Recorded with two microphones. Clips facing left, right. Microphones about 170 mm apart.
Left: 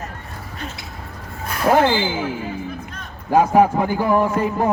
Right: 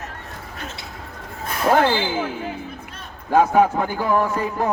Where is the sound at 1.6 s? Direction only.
5° left (ahead or behind).